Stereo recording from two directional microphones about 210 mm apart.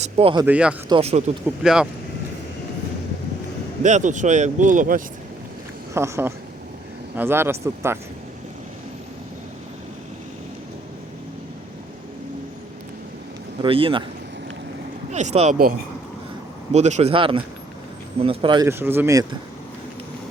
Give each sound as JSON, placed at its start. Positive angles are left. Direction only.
{"t": 0.0, "sound": "speech", "side_deg": -25}
{"t": 0.4, "sound": "speech", "side_deg": -5}
{"t": 0.9, "sound": "speech", "side_deg": -25}
{"t": 1.5, "sound": "speech", "side_deg": -5}
{"t": 3.8, "sound": "speech", "side_deg": -35}
{"t": 5.9, "sound": "speech", "side_deg": -10}
{"t": 13.6, "sound": "speech", "side_deg": -25}
{"t": 15.1, "sound": "speech", "side_deg": -35}
{"t": 16.7, "sound": "speech", "side_deg": -30}